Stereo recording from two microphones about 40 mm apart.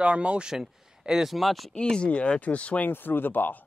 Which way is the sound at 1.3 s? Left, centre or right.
Centre.